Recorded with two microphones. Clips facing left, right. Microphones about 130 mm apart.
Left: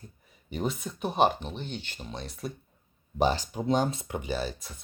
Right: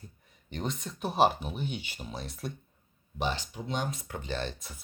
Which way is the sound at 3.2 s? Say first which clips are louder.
Left 7 dB; 40° left (ahead or behind).